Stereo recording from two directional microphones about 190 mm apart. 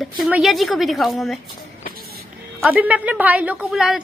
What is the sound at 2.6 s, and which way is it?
A woman's voice, 10° right (ahead or behind).